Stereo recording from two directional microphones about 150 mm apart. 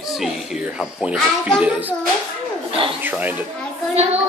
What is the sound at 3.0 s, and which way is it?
Speech, 10° right (ahead or behind).